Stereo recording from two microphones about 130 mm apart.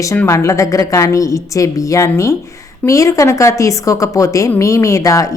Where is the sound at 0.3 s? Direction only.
25° left (ahead or behind).